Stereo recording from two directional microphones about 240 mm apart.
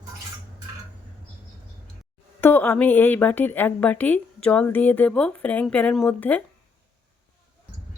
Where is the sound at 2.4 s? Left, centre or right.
Centre.